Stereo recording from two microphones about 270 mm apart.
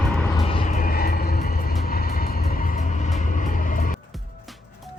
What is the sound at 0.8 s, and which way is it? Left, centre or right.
Vehicle, left.